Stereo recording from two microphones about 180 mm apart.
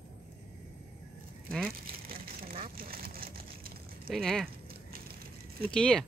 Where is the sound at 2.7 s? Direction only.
55° right (ahead or behind).